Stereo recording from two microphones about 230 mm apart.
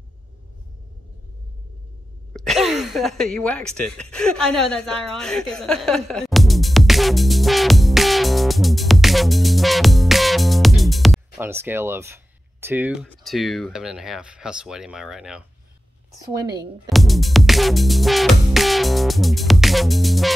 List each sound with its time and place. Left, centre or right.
2.3 s speech: centre
16.4 s speech: centre
16.9 s music: centre